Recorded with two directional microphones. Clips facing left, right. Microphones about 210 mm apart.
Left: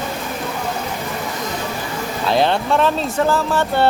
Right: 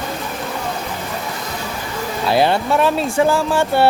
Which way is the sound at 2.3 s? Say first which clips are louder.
Right 1 dB; 5° right (ahead or behind).